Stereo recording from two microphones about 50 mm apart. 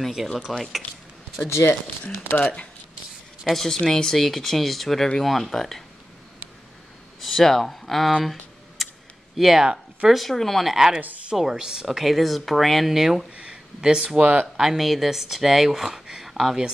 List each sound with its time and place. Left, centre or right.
0.0 s speech: centre
1.5 s speech: left
2.3 s speech: left
3.5 s speech: centre
7.2 s speech: centre
8.2 s a sound: centre
9.4 s speech: centre
14.2 s speech: right
14.6 s speech: centre